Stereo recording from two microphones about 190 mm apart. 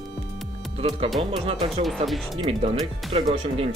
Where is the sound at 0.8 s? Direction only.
30° right (ahead or behind).